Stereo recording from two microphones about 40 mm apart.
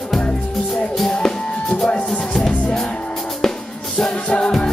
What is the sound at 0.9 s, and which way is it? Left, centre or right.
Music, centre.